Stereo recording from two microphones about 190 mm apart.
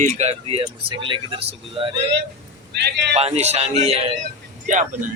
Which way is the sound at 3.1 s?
35° right (ahead or behind).